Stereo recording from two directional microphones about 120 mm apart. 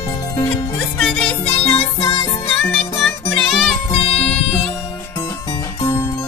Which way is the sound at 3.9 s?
55° left (ahead or behind).